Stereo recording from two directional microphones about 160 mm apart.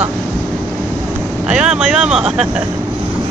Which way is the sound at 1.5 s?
5° right (ahead or behind).